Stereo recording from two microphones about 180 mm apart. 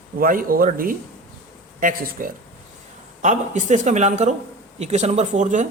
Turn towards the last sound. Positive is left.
turn(degrees=-45)  # may be behind; listen again after turning